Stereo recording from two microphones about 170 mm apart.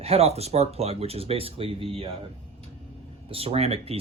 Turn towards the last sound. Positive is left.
turn(degrees=-35)  # may be behind; listen again after turning